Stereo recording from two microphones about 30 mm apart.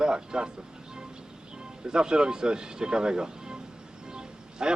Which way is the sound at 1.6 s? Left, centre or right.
Right.